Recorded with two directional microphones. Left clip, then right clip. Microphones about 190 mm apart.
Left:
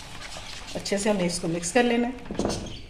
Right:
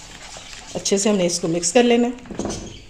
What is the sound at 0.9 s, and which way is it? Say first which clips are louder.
Speech: right 6 dB; 60° right (ahead or behind).